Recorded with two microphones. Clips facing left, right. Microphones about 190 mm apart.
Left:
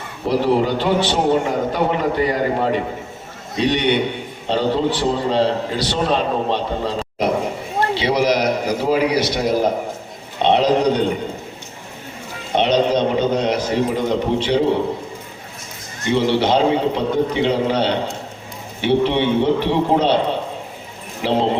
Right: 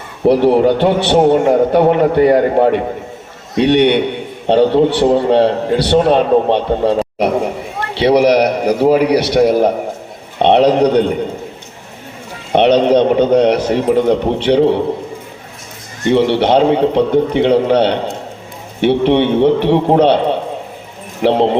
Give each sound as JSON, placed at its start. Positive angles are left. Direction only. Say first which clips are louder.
{"t": 0.3, "sound": "a man's voice", "louder": "right 7 dB", "side_deg": -60}
{"t": 12.5, "sound": "a man's voice", "louder": "right 7 dB", "side_deg": -60}
{"t": 16.0, "sound": "a man's voice", "louder": "right 5 dB", "side_deg": -60}
{"t": 21.2, "sound": "speech", "louder": "right 6 dB", "side_deg": -60}